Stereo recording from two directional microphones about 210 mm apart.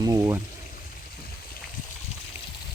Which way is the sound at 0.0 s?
15° right (ahead or behind).